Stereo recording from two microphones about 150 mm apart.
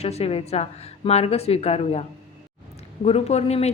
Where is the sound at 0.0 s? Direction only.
45° left (ahead or behind).